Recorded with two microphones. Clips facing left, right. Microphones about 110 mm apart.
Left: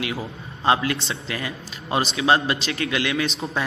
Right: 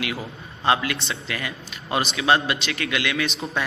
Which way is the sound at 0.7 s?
30° left (ahead or behind).